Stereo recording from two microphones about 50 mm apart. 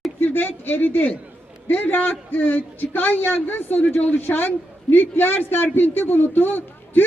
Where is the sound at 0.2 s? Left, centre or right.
Left.